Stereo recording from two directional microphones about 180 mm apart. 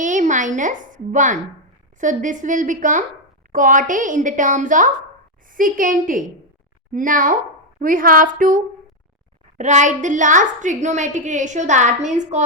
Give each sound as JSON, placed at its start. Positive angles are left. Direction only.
{"t": 0.0, "sound": "a woman's voice", "side_deg": -45}